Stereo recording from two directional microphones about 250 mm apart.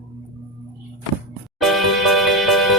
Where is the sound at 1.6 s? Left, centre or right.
Centre.